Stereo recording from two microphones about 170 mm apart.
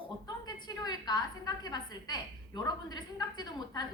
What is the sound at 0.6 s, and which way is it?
A woman's voice, 25° left (ahead or behind).